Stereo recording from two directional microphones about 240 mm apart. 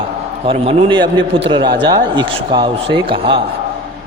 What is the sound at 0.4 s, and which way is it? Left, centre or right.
Mantra, right.